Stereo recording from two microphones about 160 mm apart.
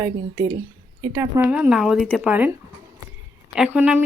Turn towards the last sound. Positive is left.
turn(degrees=-5)  # may be behind; listen again after turning